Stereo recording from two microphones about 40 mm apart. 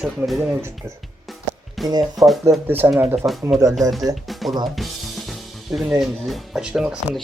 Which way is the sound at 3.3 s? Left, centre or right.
Centre.